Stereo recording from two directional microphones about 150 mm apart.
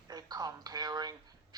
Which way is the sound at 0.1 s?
25° right (ahead or behind).